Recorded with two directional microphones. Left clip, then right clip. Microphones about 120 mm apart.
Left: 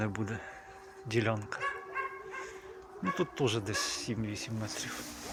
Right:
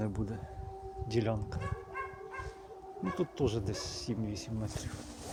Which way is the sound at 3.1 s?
15° right (ahead or behind).